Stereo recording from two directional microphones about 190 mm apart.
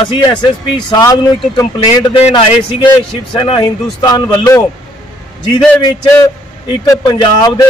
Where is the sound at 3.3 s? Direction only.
25° left (ahead or behind).